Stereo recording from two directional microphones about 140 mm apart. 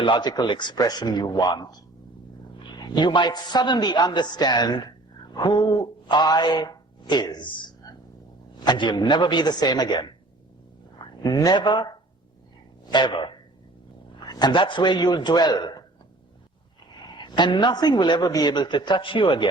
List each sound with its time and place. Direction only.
0.0 s speech: 35° left (ahead or behind)
2.7 s a man's voice: 30° left (ahead or behind)
8.5 s a man's voice: 30° left (ahead or behind)
12.9 s a man's voice: 35° left (ahead or behind)
17.1 s a man's voice: 30° left (ahead or behind)